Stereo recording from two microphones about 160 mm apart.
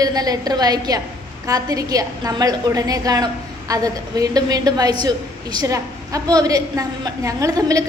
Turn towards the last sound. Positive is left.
turn(degrees=-20)  # may be behind; listen again after turning